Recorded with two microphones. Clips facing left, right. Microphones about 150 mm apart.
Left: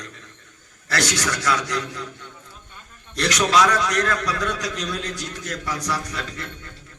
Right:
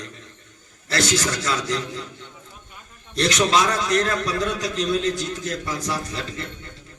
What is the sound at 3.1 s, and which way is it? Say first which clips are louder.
A man's voice: even; 25° right (ahead or behind).